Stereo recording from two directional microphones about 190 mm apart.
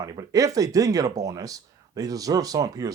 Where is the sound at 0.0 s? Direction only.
20° right (ahead or behind).